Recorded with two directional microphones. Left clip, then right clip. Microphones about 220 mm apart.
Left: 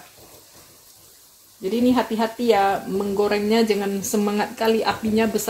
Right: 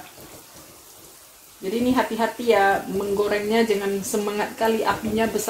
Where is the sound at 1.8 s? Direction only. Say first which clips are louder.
Left 1 dB; 50° left (ahead or behind).